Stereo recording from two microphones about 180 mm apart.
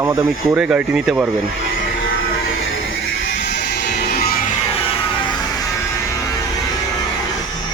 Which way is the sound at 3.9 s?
65° left (ahead or behind).